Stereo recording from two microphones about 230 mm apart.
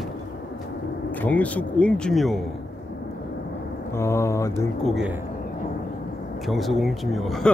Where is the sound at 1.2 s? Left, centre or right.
Centre.